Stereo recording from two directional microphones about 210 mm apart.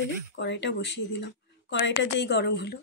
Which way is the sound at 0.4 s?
55° left (ahead or behind).